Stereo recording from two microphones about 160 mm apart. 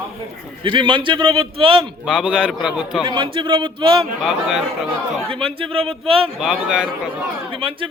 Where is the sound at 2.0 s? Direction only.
5° right (ahead or behind).